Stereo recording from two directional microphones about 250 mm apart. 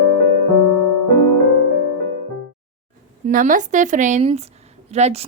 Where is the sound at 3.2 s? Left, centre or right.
Right.